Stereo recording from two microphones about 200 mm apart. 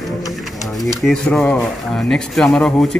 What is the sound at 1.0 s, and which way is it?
Speech, 5° left (ahead or behind).